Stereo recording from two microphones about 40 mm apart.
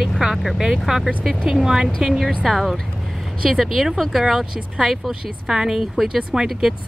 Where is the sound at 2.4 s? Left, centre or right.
Centre.